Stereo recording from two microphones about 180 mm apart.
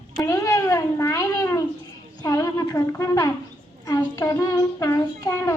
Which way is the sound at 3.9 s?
20° left (ahead or behind).